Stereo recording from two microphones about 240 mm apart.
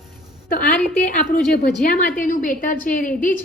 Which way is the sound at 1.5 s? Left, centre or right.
Left.